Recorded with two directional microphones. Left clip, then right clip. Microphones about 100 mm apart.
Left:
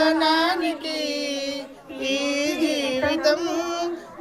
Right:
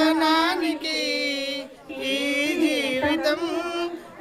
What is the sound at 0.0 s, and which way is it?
Music, 5° right (ahead or behind).